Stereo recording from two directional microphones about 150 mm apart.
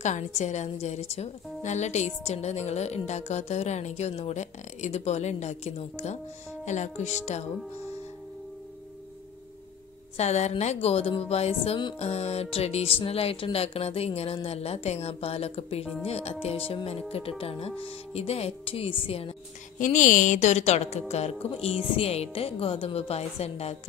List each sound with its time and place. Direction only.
0.0 s speech: 50° left (ahead or behind)
10.1 s speech: 50° left (ahead or behind)
16.0 s music: 45° left (ahead or behind)
19.8 s speech: 60° left (ahead or behind)